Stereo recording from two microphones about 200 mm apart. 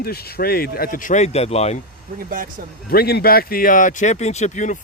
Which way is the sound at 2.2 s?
45° right (ahead or behind).